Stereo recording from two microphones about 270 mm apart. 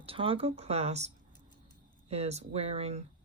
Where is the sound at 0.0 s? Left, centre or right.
Right.